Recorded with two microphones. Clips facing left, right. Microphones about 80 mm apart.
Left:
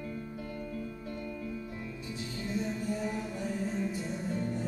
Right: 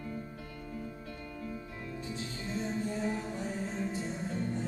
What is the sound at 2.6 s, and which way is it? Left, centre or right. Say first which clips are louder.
Music: right 1 dB; right.